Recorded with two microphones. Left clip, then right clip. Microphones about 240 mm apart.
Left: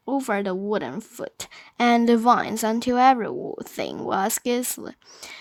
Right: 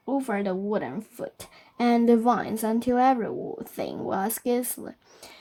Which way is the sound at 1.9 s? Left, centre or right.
Left.